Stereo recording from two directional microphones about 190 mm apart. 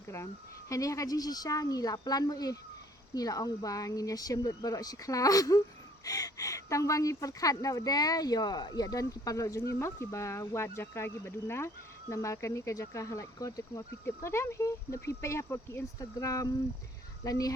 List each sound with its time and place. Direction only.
0.7 s speech: 15° left (ahead or behind)